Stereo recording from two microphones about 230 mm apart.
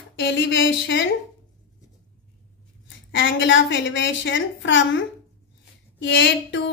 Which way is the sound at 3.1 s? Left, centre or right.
Left.